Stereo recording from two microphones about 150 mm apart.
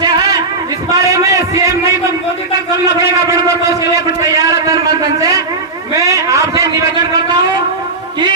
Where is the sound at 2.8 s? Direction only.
20° right (ahead or behind).